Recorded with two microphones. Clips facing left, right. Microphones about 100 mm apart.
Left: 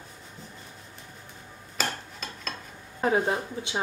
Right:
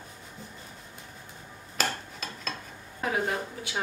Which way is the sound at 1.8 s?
Centre (ahead or behind).